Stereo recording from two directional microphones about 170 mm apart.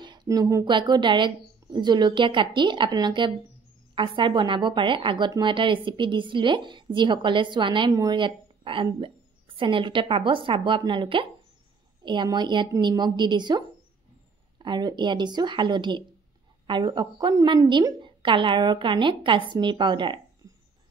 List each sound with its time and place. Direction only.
0.0 s a woman's voice: 25° right (ahead or behind)